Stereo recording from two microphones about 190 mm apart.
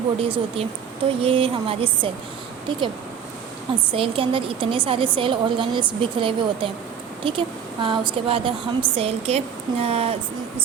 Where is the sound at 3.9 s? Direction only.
30° right (ahead or behind).